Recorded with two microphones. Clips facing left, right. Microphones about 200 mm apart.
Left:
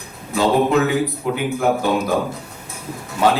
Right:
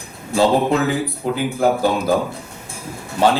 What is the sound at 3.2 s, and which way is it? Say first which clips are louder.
Speech: right 1 dB; 30° right (ahead or behind).